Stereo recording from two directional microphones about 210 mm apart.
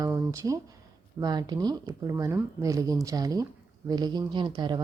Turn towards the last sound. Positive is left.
turn(degrees=-20)  # may be behind; listen again after turning